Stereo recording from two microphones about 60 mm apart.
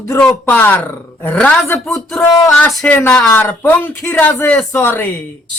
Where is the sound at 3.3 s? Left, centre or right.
Left.